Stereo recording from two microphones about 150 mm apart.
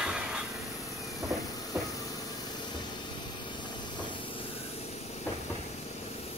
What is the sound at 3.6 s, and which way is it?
Hiss, 30° left (ahead or behind).